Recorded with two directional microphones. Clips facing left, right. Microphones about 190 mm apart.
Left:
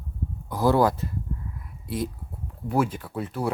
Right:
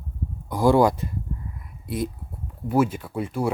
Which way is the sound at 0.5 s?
15° right (ahead or behind).